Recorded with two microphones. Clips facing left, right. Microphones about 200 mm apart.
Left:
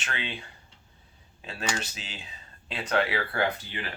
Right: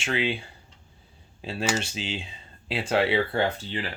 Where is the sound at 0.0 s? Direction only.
30° right (ahead or behind).